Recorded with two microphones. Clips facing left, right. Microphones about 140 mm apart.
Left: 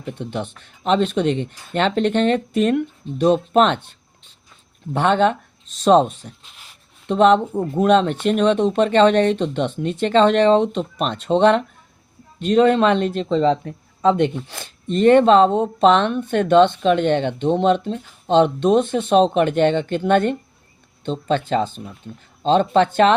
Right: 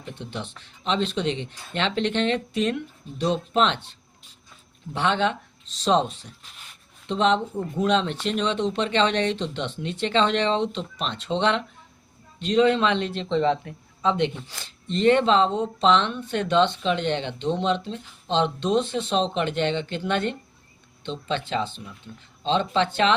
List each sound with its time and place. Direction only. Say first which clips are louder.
0.1 s a man's voice: left 8 dB; 55° left (ahead or behind)
4.9 s a man's voice: left 7 dB; 45° left (ahead or behind)